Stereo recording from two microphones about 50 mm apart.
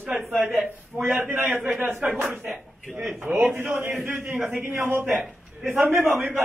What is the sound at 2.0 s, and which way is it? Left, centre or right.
Speech, right.